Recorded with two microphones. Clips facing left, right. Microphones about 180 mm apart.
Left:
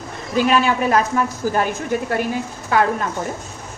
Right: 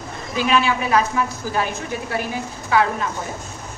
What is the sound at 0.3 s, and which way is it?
A woman's voice, 45° left (ahead or behind).